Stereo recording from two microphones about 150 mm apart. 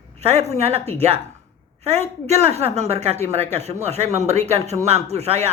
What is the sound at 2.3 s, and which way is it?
Speech, 45° right (ahead or behind).